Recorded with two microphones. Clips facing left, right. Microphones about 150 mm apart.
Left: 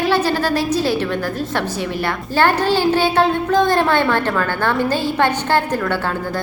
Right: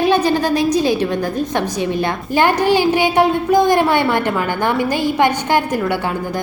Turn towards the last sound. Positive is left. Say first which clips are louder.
# right 1 dB
turn(degrees=-15)  # may be behind; listen again after turning